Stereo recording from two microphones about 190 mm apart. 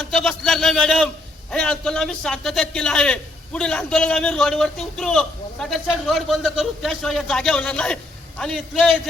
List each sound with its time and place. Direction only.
0.0 s a man's voice: centre (ahead or behind)